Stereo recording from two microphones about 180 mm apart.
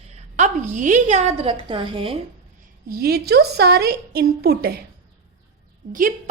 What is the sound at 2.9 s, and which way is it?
A woman's voice, 60° right (ahead or behind).